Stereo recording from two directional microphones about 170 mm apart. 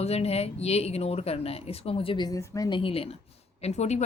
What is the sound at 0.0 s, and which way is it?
Speech, 35° left (ahead or behind).